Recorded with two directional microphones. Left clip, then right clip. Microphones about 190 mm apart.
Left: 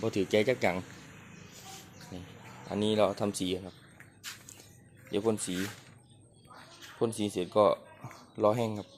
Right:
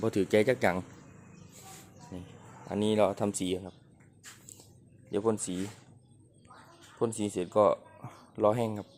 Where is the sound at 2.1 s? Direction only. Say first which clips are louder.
Even; 10° right (ahead or behind).